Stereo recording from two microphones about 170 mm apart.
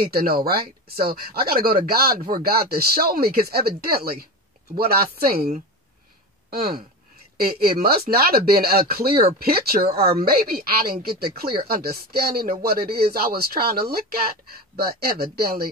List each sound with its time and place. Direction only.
0.0 s speech: 60° right (ahead or behind)